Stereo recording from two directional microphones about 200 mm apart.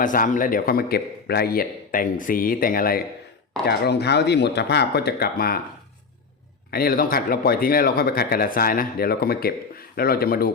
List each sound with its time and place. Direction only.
0.0 s speech: 40° left (ahead or behind)
6.7 s speech: 50° left (ahead or behind)